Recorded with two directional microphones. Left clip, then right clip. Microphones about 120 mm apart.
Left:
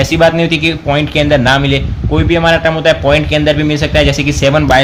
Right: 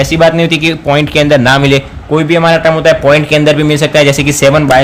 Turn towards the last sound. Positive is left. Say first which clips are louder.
# right 3 dB
turn(degrees=-35)  # may be behind; listen again after turning